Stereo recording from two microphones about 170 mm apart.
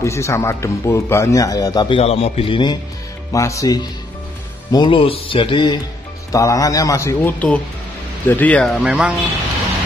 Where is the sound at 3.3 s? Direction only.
20° left (ahead or behind).